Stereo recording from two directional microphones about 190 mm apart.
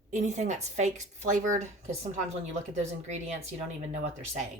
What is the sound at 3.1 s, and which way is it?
Speech, 35° right (ahead or behind).